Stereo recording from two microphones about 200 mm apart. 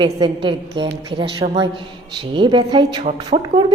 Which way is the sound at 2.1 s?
25° right (ahead or behind).